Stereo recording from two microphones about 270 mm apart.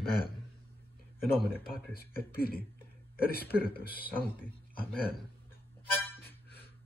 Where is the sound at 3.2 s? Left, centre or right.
Left.